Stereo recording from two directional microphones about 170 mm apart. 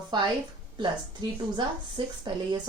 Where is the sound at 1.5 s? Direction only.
25° right (ahead or behind).